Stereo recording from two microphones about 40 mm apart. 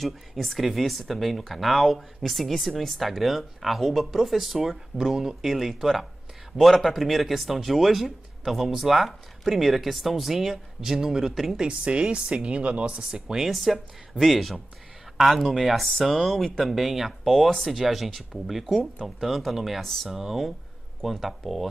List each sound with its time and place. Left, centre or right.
0.0 s speech: centre
11.6 s a woman's voice: right
13.1 s speech: centre
13.5 s speech: centre